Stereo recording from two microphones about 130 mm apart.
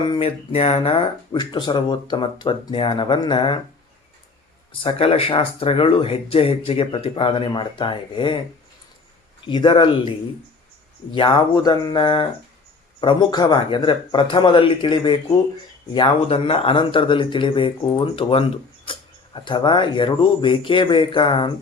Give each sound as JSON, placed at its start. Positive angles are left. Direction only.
{"t": 0.0, "sound": "speech", "side_deg": 45}
{"t": 4.7, "sound": "speech", "side_deg": 45}
{"t": 9.5, "sound": "speech", "side_deg": 40}